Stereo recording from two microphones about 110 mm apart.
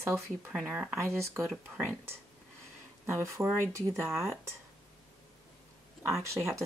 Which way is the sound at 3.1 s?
25° right (ahead or behind).